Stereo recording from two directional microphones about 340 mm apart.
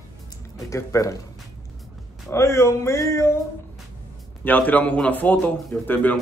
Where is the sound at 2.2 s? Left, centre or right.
Centre.